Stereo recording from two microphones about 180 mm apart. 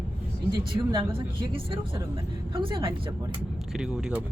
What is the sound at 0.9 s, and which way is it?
Speech, 30° right (ahead or behind).